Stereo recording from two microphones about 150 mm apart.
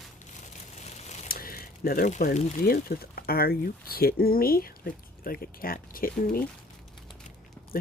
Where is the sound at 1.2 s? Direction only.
75° left (ahead or behind).